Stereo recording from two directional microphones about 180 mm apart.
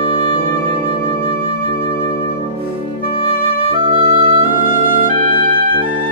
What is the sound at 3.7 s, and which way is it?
Music, 30° right (ahead or behind).